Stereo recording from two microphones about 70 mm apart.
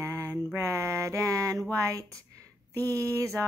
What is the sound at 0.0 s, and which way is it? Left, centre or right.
Mantra, right.